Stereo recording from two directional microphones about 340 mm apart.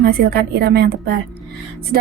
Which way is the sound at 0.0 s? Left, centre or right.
Right.